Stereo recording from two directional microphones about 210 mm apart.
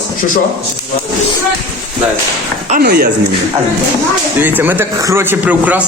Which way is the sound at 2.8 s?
50° right (ahead or behind).